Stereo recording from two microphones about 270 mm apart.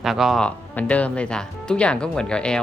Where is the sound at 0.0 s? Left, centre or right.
Centre.